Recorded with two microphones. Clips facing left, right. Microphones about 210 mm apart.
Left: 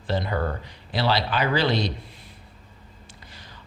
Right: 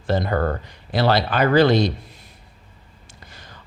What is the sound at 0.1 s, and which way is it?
A man's voice, 50° right (ahead or behind).